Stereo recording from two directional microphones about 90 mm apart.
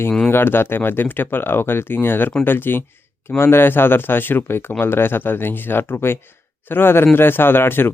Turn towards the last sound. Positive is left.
turn(degrees=25)  # may be behind; listen again after turning